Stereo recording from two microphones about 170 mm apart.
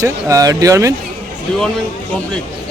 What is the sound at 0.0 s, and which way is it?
Speech, 20° right (ahead or behind).